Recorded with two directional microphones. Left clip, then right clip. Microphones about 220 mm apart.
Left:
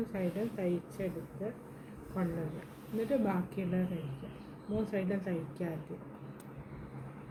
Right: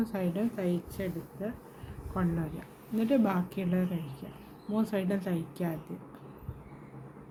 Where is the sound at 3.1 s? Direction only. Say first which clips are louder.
Right 5 dB; 50° right (ahead or behind).